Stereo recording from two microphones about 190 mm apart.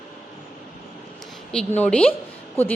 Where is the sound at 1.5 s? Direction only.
5° left (ahead or behind).